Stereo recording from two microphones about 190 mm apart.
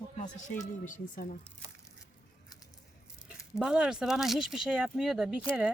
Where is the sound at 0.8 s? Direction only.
45° left (ahead or behind).